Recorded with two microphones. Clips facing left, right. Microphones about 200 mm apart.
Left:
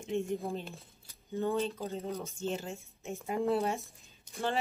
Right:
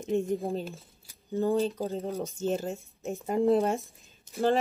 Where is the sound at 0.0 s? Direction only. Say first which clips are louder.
Right 5 dB; 40° right (ahead or behind).